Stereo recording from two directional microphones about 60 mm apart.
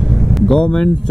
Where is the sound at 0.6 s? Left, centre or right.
Centre.